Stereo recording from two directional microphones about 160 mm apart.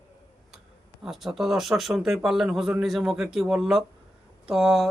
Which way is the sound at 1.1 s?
Centre (ahead or behind).